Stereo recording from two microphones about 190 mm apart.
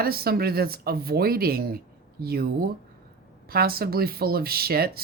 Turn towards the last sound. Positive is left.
turn(degrees=-55)  # may be behind; listen again after turning